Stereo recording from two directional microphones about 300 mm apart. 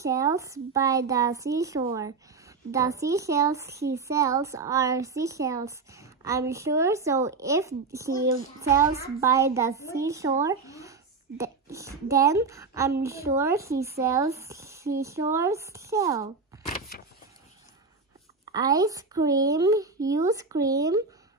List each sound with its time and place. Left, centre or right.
0.0 s a woman's voice: centre
16.6 s vehicle: left
18.5 s a woman's voice: centre